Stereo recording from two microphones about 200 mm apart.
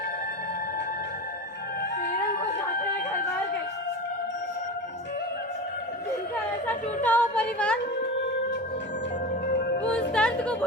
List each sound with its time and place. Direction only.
1.8 s music: 45° left (ahead or behind)
6.7 s a woman's voice: 10° left (ahead or behind)
8.1 s music: 60° left (ahead or behind)
9.5 s music: 55° left (ahead or behind)
10.1 s chatter: 5° left (ahead or behind)